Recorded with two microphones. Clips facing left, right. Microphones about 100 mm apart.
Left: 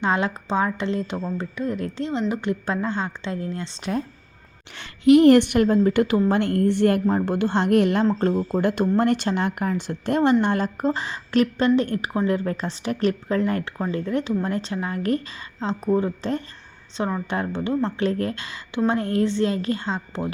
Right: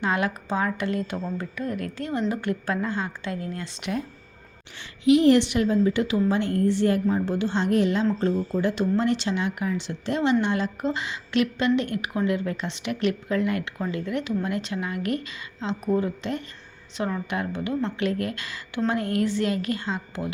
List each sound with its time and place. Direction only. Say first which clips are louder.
0.0 s a woman's voice: left 2 dB; 25° left (ahead or behind)
4.8 s a woman's voice: left 5 dB; 55° left (ahead or behind); by 20.3 s 30° left (ahead or behind)